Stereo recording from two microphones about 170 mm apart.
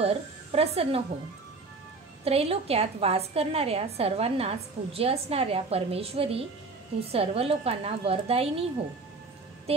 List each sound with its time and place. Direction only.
0.0 s a woman's voice: 35° right (ahead or behind)
2.2 s a woman's voice: 35° right (ahead or behind)
9.7 s a woman's voice: 35° right (ahead or behind)